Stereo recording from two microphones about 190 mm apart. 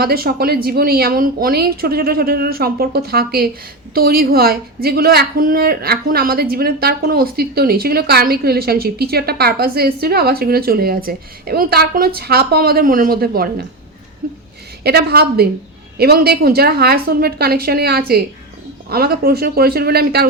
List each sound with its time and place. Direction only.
0.0 s a woman's voice: 55° right (ahead or behind)
14.2 s a sound: 50° right (ahead or behind)
14.8 s a woman's voice: 55° right (ahead or behind)